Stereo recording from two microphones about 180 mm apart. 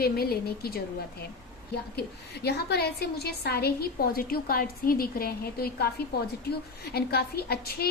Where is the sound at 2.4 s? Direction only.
65° left (ahead or behind).